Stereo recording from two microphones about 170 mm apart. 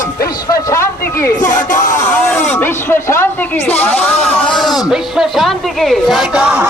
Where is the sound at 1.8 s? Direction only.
15° left (ahead or behind).